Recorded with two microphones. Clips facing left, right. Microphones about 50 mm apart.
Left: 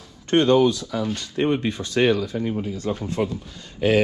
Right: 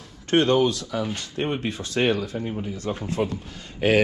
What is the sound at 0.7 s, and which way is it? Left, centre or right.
Speech, right.